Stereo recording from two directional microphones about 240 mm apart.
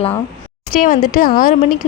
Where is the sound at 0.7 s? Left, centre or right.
Left.